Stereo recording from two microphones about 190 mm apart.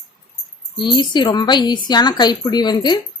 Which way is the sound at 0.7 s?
25° left (ahead or behind).